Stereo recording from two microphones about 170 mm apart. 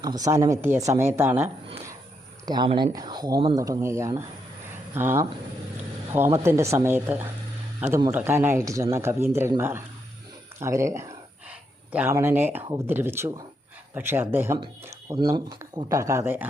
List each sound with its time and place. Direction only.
0.0 s speech: 20° right (ahead or behind)
2.5 s a man's voice: 25° right (ahead or behind)